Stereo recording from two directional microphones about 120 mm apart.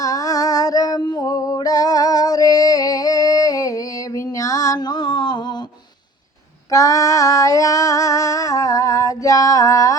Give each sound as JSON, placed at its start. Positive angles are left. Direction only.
{"t": 0.0, "sound": "music", "side_deg": 30}
{"t": 6.7, "sound": "female singing", "side_deg": 25}